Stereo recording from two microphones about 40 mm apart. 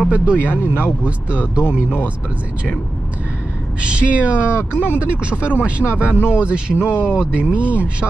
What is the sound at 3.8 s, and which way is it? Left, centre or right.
Speech, right.